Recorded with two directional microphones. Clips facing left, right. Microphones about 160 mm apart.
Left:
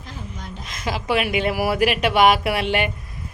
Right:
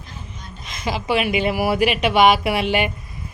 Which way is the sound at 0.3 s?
90° left.